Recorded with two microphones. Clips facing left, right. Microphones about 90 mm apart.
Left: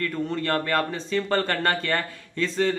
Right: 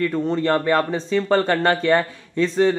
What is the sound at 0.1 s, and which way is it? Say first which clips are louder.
Speech: right 6 dB; 25° right (ahead or behind).